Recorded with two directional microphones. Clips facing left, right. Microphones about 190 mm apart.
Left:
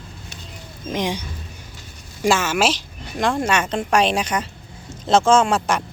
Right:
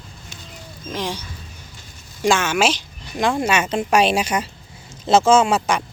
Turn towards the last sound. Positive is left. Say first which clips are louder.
# right 1 dB
turn(degrees=-5)  # may be behind; listen again after turning